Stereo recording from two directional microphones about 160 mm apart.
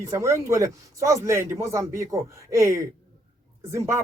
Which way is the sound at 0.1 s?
20° right (ahead or behind).